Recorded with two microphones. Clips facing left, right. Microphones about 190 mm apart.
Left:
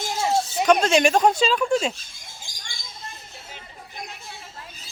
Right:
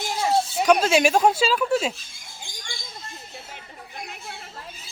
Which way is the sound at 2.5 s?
40° left (ahead or behind).